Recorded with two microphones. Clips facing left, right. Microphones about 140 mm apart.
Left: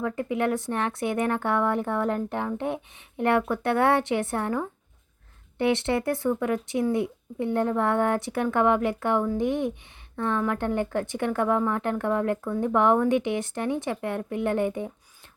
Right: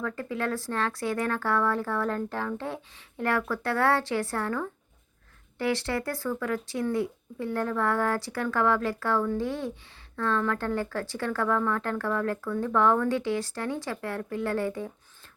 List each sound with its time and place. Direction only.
0.0 s a woman's voice: 20° left (ahead or behind)